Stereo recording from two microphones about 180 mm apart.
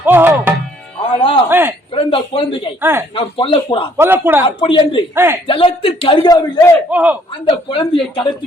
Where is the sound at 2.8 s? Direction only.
10° right (ahead or behind).